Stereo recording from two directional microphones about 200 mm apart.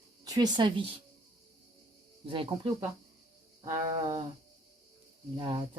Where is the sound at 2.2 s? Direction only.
25° right (ahead or behind).